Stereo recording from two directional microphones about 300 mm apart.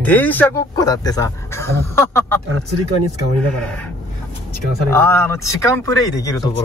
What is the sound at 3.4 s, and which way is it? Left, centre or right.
Speech, centre.